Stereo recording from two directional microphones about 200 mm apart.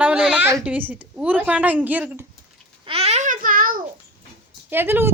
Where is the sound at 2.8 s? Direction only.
30° right (ahead or behind); by 3.8 s 45° right (ahead or behind).